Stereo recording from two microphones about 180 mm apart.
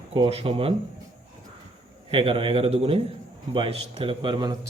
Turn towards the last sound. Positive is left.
turn(degrees=-25)  # may be behind; listen again after turning